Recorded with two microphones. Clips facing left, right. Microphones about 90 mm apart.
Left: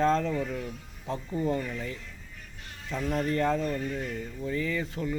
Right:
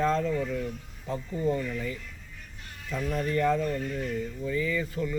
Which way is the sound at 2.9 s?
25° left (ahead or behind).